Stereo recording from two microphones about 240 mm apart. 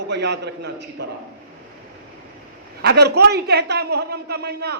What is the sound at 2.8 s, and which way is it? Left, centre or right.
A woman's voice, right.